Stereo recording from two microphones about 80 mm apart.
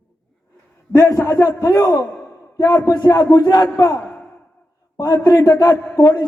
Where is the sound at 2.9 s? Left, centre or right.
Left.